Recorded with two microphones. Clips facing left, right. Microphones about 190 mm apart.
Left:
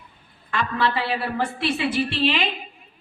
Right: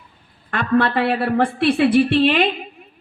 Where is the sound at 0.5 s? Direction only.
55° right (ahead or behind).